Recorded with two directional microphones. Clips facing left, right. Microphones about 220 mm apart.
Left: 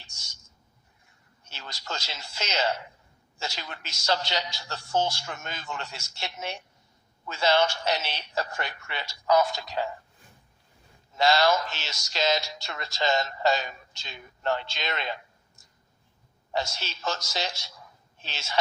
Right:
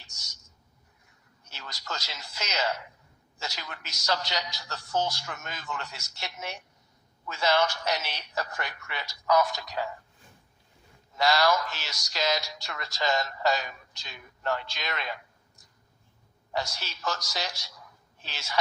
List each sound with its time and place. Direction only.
0.0 s a sound: 25° left (ahead or behind)
1.5 s speech: 30° left (ahead or behind)
11.1 s a woman's voice: 25° left (ahead or behind)